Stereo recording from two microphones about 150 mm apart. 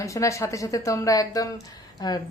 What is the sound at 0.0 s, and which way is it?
Speech, 20° left (ahead or behind).